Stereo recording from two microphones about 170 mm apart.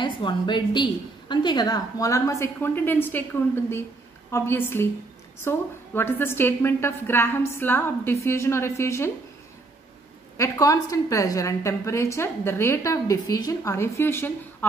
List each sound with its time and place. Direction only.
0.0 s a woman's voice: 25° left (ahead or behind); by 3.3 s 10° left (ahead or behind)
4.3 s a woman's voice: 15° left (ahead or behind)
10.3 s a woman's voice: 15° left (ahead or behind)